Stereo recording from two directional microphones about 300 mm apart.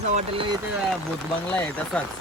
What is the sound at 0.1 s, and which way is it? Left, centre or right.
Speech, right.